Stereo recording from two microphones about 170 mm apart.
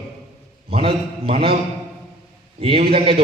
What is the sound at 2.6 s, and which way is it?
Speech, 35° right (ahead or behind).